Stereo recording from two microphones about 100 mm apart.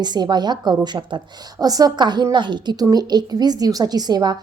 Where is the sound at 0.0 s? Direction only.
45° right (ahead or behind).